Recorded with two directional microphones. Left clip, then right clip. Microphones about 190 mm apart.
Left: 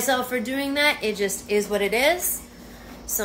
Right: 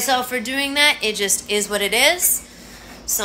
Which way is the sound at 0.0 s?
10° left (ahead or behind).